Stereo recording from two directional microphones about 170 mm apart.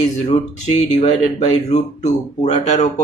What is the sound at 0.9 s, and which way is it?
Speech, 40° left (ahead or behind).